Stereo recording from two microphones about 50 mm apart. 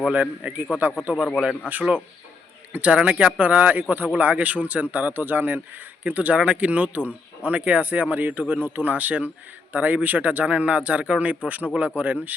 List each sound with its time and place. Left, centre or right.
0.1 s speech: right
2.7 s speech: right